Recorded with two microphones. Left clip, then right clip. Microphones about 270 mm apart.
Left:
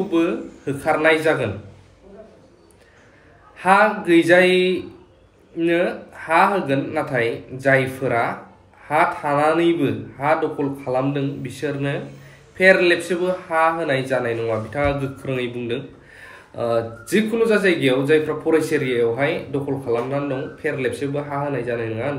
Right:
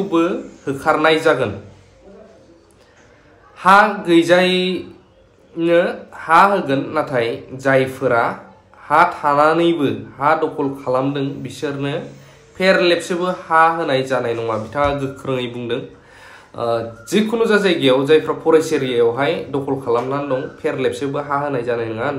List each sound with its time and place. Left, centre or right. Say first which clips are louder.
0.1 s speech: right 4 dB; centre
3.5 s speech: right 4 dB; centre